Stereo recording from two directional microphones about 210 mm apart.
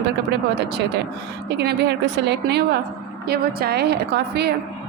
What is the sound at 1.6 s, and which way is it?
A woman's voice, 50° right (ahead or behind).